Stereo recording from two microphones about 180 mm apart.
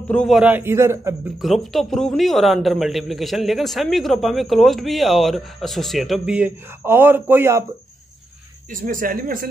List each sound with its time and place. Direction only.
0.1 s a man's voice: centre (ahead or behind)
0.5 s a man's voice: 10° right (ahead or behind)
1.4 s a man's voice: centre (ahead or behind)
8.7 s speech: 50° right (ahead or behind)